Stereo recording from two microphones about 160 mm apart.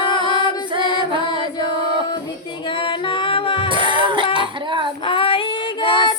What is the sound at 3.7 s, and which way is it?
Music, 30° right (ahead or behind).